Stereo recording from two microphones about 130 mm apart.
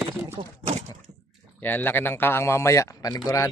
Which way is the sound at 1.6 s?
15° left (ahead or behind).